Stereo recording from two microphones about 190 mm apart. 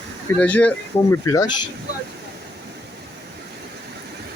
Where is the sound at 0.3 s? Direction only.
10° left (ahead or behind).